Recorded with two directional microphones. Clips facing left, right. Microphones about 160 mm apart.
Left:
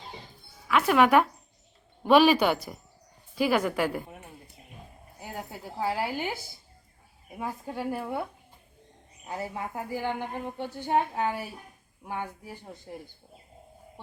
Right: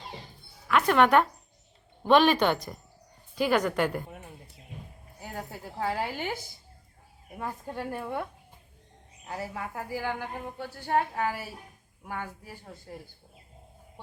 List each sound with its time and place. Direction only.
0.7 s music: 5° left (ahead or behind)
2.0 s a woman's voice: 5° left (ahead or behind)
5.2 s a woman's voice: 10° left (ahead or behind)